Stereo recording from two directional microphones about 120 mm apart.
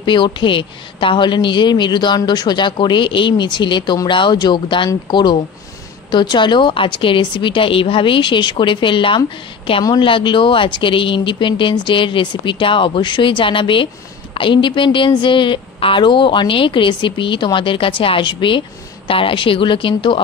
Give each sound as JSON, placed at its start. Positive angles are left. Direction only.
{"t": 0.0, "sound": "a woman's voice", "side_deg": 40}